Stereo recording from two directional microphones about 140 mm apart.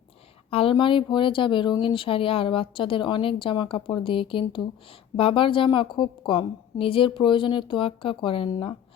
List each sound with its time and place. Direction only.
0.5 s speech: 40° left (ahead or behind)